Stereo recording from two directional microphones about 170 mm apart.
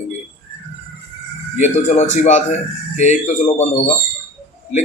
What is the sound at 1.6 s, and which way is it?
Speech, 45° left (ahead or behind).